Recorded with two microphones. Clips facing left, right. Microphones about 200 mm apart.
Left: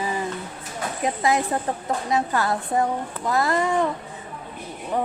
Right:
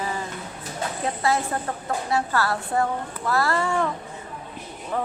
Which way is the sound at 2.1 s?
20° left (ahead or behind).